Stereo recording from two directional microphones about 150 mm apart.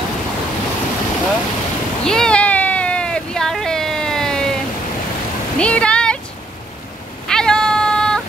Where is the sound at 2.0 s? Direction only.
5° left (ahead or behind).